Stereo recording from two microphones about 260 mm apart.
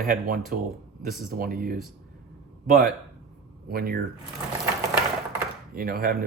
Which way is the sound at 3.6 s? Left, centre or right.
Right.